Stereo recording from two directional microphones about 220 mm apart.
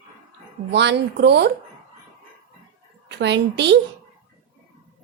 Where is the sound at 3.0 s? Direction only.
50° right (ahead or behind).